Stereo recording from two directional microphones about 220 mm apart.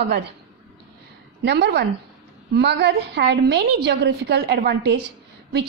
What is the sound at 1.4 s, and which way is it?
A woman's voice, 50° right (ahead or behind).